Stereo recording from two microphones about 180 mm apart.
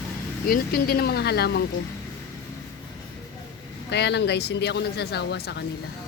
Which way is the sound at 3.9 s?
70° left (ahead or behind).